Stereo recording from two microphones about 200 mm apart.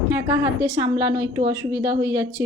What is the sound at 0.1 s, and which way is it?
A woman's voice, 15° right (ahead or behind).